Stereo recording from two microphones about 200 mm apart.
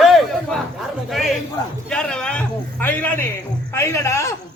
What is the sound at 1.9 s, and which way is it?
A man's voice, 5° left (ahead or behind).